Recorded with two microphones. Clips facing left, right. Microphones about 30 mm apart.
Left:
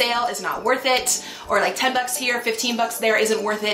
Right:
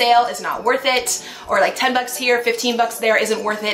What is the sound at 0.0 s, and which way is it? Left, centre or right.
A woman's voice, centre.